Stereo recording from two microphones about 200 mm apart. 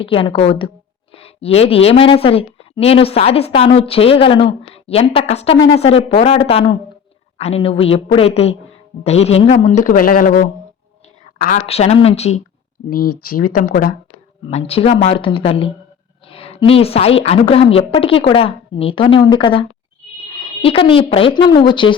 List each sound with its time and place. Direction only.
0.0 s a man's voice: 25° left (ahead or behind); by 11.6 s 45° left (ahead or behind)
11.6 s a man's voice: 30° left (ahead or behind)
12.9 s speech: 50° left (ahead or behind)
14.5 s speech: 30° left (ahead or behind)